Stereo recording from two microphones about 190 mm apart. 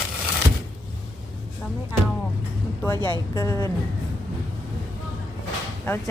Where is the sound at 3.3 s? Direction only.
20° left (ahead or behind).